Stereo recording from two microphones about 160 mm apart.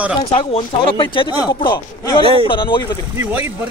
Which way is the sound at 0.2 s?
30° left (ahead or behind).